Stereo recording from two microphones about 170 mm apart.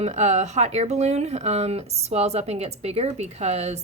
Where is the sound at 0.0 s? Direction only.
40° right (ahead or behind).